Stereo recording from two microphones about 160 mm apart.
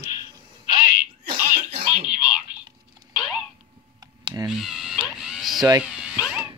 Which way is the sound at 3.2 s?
5° right (ahead or behind).